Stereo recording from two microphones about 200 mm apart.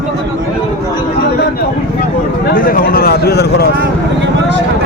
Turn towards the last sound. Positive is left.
turn(degrees=55)  # may be behind; listen again after turning